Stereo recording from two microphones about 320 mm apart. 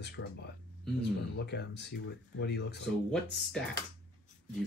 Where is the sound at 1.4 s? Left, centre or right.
Left.